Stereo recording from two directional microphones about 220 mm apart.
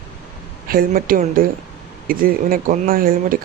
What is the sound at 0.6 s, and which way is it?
Speech, 40° right (ahead or behind).